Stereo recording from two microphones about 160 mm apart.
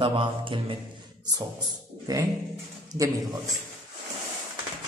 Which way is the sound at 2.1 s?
25° right (ahead or behind).